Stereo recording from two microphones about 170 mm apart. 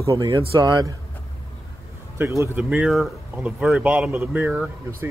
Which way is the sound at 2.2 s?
15° right (ahead or behind).